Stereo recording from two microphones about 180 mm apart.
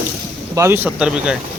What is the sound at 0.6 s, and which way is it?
Speech, 10° right (ahead or behind).